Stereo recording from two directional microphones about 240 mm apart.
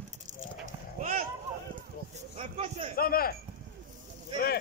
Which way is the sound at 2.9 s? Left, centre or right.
Left.